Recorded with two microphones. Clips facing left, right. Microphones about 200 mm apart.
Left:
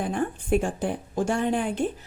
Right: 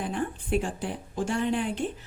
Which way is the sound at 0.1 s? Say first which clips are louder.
Left 4 dB; 50° left (ahead or behind).